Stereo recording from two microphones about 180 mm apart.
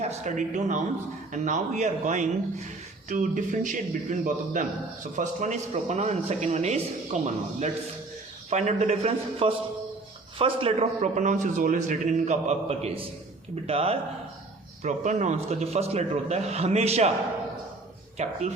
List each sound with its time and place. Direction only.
0.0 s a man's voice: 40° right (ahead or behind)
8.4 s a man's voice: 40° right (ahead or behind)
18.2 s a man's voice: 40° right (ahead or behind)